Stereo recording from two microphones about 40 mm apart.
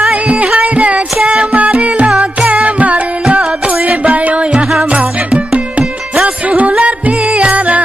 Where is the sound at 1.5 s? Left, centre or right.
Right.